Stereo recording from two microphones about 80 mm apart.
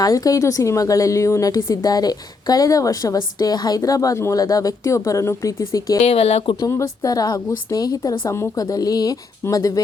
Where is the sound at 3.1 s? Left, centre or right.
Left.